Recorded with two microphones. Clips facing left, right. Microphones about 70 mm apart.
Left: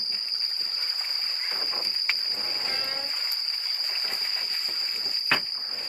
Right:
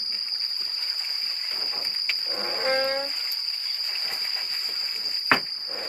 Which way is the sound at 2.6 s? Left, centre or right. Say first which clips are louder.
Right 14 dB; right.